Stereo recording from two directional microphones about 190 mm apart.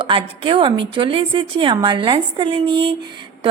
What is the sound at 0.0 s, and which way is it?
A woman's voice, 25° right (ahead or behind).